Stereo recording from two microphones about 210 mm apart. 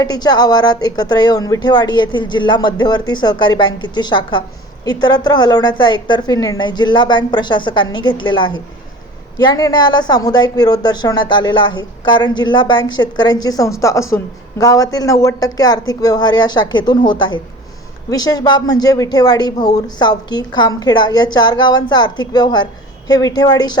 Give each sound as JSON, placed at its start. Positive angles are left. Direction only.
{"t": 0.0, "sound": "speech", "side_deg": 20}